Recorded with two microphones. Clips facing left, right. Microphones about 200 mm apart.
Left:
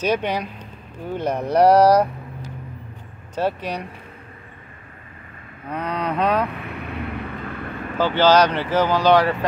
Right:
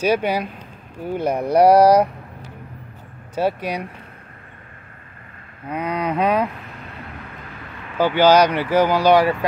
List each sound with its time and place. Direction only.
0.0 s speech: 10° right (ahead or behind)
3.3 s speech: 10° right (ahead or behind)
5.7 s speech: 10° right (ahead or behind)
6.6 s vehicle: 65° left (ahead or behind)
8.0 s speech: 10° right (ahead or behind)